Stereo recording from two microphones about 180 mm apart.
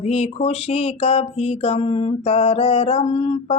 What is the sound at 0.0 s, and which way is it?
Mantra, 35° left (ahead or behind).